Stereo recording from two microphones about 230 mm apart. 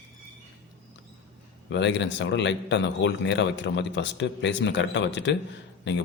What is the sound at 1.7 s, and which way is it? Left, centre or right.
Speech, left.